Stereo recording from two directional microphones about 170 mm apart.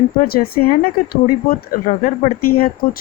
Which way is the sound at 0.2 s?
60° left (ahead or behind).